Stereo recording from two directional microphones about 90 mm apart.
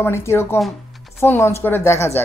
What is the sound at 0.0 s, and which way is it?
A woman's voice, 30° left (ahead or behind).